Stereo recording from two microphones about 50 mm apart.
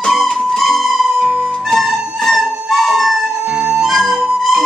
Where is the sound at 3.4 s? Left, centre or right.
Right.